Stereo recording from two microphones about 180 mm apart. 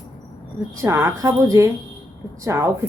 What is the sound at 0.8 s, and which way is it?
A woman's voice, 15° right (ahead or behind).